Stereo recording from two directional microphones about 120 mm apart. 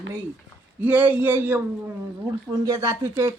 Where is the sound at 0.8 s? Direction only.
15° right (ahead or behind).